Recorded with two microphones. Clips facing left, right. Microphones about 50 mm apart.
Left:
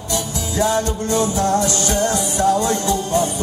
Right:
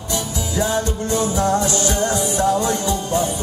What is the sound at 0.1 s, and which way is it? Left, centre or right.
Music, right.